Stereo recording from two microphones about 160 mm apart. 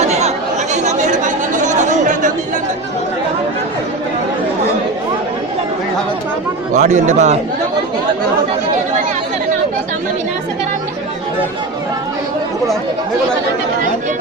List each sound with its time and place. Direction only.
0.0 s chatter: 45° right (ahead or behind)
6.7 s speech: 50° right (ahead or behind)